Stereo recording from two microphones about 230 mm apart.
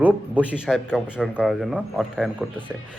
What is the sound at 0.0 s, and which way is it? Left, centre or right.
A man's voice, centre.